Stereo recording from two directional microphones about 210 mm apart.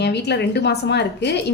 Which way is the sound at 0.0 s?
50° left (ahead or behind).